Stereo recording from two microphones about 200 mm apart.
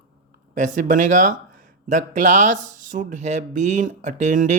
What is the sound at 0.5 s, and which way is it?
Speech, 40° right (ahead or behind).